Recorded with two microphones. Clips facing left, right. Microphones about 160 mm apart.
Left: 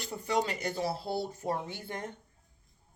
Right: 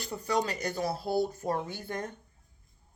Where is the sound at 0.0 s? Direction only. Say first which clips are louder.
Right 1 dB; 25° left (ahead or behind).